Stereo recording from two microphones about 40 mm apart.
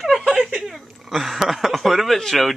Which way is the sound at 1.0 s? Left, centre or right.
Centre.